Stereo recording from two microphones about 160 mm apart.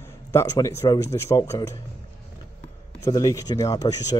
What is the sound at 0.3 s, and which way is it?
Speech, 20° left (ahead or behind).